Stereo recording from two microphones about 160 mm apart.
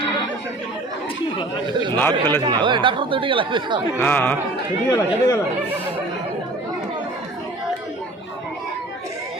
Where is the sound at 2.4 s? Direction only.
30° right (ahead or behind).